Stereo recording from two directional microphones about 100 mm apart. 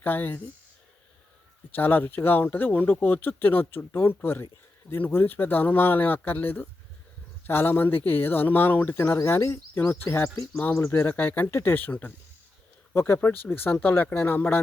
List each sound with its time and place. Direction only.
0.0 s speech: 20° left (ahead or behind)
1.7 s speech: 20° left (ahead or behind)